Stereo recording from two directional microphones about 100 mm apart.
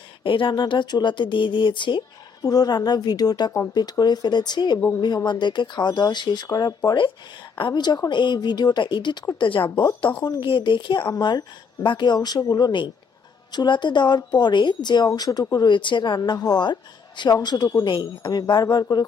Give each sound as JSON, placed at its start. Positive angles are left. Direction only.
{"t": 0.2, "sound": "a woman's voice", "side_deg": 55}